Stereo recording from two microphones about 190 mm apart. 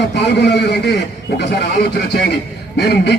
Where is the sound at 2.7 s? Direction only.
60° left (ahead or behind).